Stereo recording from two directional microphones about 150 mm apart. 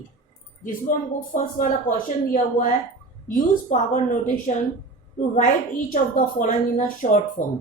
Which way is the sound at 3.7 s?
60° left (ahead or behind).